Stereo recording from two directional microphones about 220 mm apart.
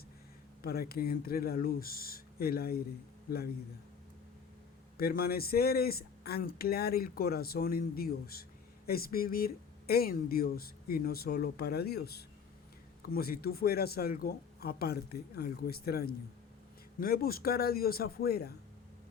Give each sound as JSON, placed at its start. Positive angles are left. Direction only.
{"t": 0.6, "sound": "a man's voice", "side_deg": 45}
{"t": 4.9, "sound": "speech", "side_deg": 45}